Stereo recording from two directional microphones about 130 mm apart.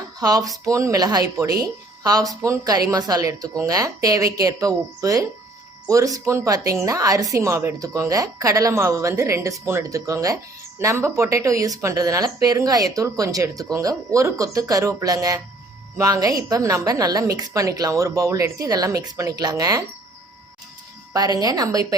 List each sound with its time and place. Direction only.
0.2 s speech: 30° right (ahead or behind)
21.3 s speech: 30° right (ahead or behind)